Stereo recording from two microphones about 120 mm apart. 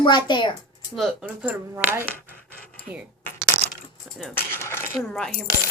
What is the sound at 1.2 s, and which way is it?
Speech, 15° right (ahead or behind).